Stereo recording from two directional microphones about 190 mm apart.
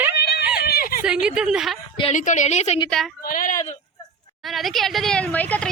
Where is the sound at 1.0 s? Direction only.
5° right (ahead or behind).